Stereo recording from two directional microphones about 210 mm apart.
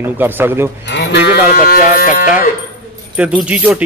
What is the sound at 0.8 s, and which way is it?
Speech, 55° left (ahead or behind).